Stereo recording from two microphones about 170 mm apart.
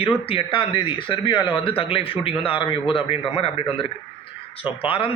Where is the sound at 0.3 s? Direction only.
30° left (ahead or behind).